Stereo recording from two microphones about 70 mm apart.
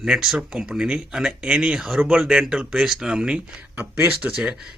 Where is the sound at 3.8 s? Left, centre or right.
Right.